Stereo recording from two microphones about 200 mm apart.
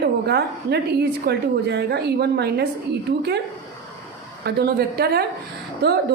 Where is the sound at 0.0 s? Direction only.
55° right (ahead or behind).